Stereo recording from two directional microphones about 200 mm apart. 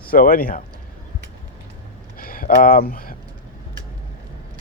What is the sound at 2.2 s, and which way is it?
Speech, 45° left (ahead or behind).